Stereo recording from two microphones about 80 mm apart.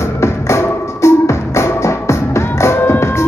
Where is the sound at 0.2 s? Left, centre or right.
Left.